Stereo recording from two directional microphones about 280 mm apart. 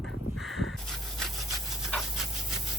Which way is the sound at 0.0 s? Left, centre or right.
Centre.